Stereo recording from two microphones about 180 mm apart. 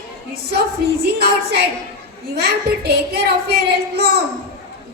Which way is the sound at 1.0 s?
65° right (ahead or behind).